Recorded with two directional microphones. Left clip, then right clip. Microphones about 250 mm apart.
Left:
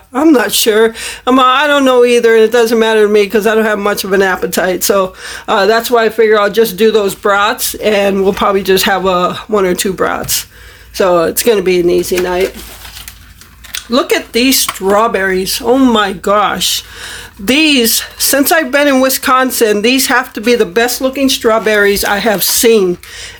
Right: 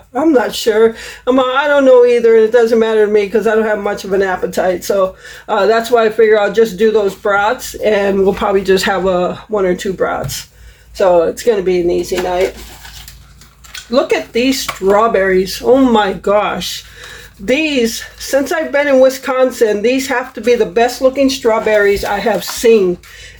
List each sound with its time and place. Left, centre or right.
0.3 s speech: left
13.9 s speech: left